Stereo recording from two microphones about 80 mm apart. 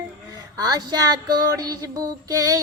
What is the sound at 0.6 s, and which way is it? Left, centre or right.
Music, right.